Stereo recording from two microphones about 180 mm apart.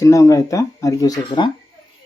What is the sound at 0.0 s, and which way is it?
Speech, 15° left (ahead or behind).